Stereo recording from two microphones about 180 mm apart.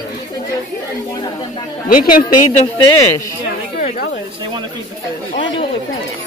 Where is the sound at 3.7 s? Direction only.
50° left (ahead or behind).